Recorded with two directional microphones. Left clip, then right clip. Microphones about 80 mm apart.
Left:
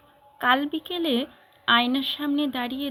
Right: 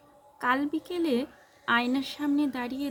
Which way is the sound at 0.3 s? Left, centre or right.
Right.